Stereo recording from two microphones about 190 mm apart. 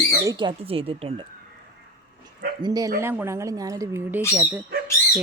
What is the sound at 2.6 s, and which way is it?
Speech, 20° right (ahead or behind).